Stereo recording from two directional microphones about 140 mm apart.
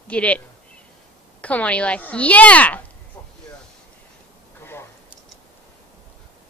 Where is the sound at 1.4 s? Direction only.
10° left (ahead or behind).